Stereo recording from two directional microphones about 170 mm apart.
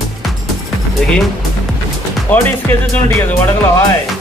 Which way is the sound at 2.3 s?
10° left (ahead or behind).